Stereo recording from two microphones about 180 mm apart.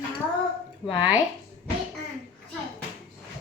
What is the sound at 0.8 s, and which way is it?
Speech, 10° right (ahead or behind).